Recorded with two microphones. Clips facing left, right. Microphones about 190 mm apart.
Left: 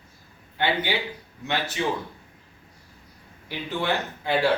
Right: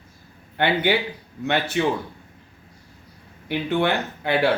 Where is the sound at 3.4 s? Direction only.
60° right (ahead or behind).